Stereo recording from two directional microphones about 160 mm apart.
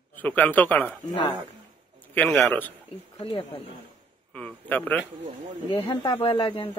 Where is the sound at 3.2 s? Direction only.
35° left (ahead or behind).